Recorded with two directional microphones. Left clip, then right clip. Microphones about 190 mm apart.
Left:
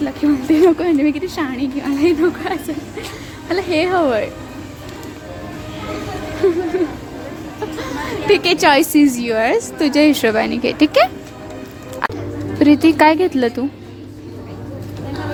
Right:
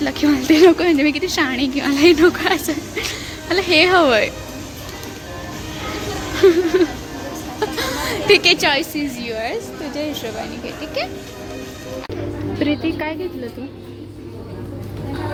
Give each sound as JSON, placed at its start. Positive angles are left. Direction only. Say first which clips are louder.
{"t": 0.0, "sound": "a woman's voice", "louder": "even", "side_deg": 5}
{"t": 6.7, "sound": "music", "louder": "right 3 dB", "side_deg": 0}
{"t": 7.8, "sound": "a sound", "louder": "right 1 dB", "side_deg": 5}
{"t": 8.1, "sound": "a sound", "louder": "right 1 dB", "side_deg": 20}
{"t": 8.5, "sound": "a woman's voice", "louder": "left 6 dB", "side_deg": 40}
{"t": 9.8, "sound": "speech", "louder": "left 15 dB", "side_deg": 70}
{"t": 12.5, "sound": "speech", "louder": "left 10 dB", "side_deg": 35}